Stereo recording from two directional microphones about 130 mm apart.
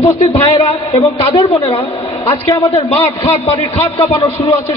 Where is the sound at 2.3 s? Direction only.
20° left (ahead or behind).